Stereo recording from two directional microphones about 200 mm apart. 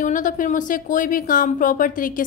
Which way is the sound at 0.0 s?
40° left (ahead or behind).